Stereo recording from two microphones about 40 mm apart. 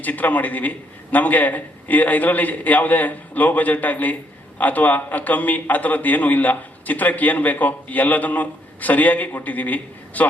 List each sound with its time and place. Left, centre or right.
0.0 s a man's voice: left